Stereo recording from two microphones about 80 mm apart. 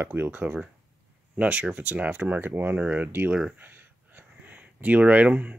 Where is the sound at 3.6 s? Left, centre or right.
Right.